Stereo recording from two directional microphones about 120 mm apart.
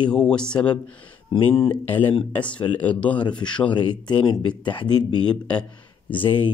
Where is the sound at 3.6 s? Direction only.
40° left (ahead or behind).